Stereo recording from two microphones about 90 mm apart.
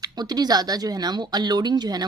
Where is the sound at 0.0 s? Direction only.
50° right (ahead or behind).